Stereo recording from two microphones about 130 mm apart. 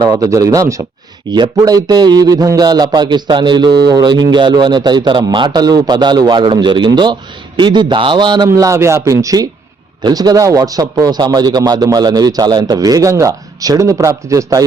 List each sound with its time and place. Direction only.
0.0 s a man's voice: 30° right (ahead or behind)
8.4 s a man's voice: 25° right (ahead or behind)